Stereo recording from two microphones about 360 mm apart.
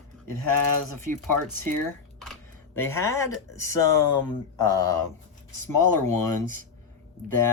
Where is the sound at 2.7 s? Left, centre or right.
Centre.